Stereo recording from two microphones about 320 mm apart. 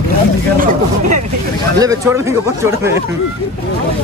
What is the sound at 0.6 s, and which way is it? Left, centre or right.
Speech, right.